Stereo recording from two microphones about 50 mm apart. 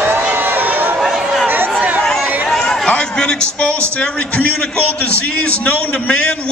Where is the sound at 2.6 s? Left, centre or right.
Centre.